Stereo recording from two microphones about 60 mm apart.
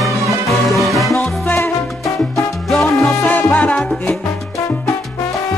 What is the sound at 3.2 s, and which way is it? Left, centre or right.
Salsa music, left.